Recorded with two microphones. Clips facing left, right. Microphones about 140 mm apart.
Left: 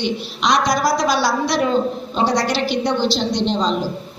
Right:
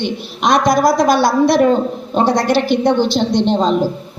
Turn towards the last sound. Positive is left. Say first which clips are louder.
# right 5 dB
turn(degrees=-55)  # may be behind; listen again after turning